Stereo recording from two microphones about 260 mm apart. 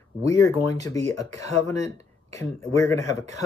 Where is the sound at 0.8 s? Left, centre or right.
Centre.